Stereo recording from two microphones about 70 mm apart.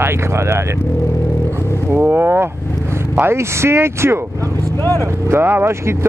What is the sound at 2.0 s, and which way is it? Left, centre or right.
Speech, right.